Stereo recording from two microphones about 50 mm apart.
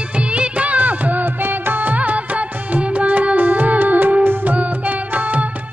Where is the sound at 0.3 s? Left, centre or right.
Right.